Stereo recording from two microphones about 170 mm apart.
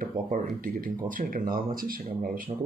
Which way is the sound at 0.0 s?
55° right (ahead or behind).